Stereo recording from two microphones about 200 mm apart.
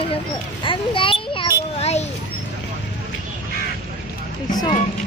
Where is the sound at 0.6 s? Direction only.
25° left (ahead or behind).